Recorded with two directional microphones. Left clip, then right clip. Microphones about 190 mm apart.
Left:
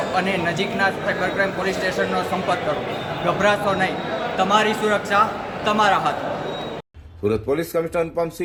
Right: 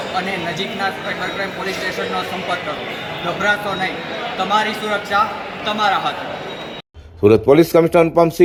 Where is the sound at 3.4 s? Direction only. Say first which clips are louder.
Right 1 dB; 10° left (ahead or behind).